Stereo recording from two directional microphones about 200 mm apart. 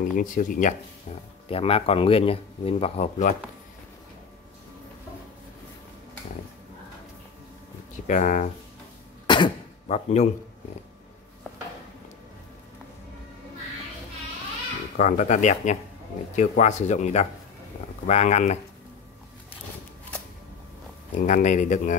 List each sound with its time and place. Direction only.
0.0 s speech: 40° left (ahead or behind)
1.5 s speech: 30° left (ahead or behind)
7.9 s speech: 40° left (ahead or behind)
9.3 s a sound: 25° left (ahead or behind)
15.0 s speech: 40° left (ahead or behind)
21.1 s speech: 40° left (ahead or behind)